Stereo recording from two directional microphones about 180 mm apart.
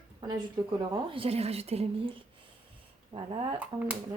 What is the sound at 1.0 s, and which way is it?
A woman's voice, 30° right (ahead or behind).